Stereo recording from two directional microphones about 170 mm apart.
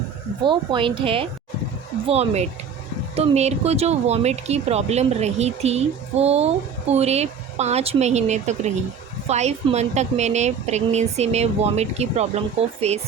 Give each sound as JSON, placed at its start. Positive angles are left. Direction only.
{"t": 0.4, "sound": "a woman's voice", "side_deg": -25}